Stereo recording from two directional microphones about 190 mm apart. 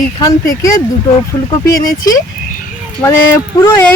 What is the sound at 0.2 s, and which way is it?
Speech, 15° left (ahead or behind).